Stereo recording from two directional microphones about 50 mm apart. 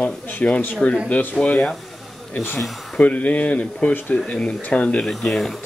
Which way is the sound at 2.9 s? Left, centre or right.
Left.